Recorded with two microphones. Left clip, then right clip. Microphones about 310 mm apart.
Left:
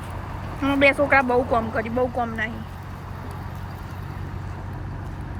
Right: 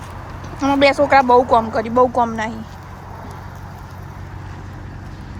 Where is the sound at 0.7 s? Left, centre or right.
Centre.